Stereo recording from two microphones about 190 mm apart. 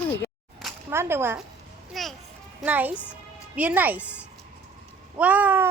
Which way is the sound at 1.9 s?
Centre (ahead or behind).